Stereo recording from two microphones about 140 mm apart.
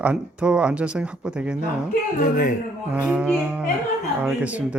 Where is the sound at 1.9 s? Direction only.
65° left (ahead or behind).